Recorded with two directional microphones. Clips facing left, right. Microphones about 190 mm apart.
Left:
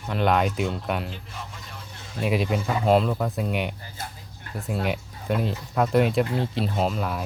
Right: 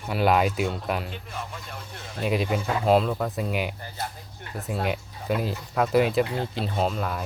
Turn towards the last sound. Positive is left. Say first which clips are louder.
# left 1 dB
turn(degrees=0)  # may be behind; listen again after turning